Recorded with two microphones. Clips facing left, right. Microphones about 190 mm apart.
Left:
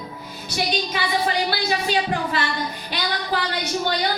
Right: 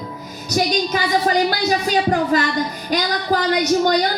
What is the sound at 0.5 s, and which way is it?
A woman's voice, 40° right (ahead or behind).